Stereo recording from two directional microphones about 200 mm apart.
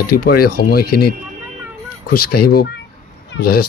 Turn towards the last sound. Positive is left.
turn(degrees=50)  # may be behind; listen again after turning